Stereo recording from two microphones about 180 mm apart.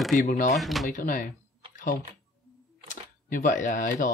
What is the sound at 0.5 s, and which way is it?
Speech, centre (ahead or behind).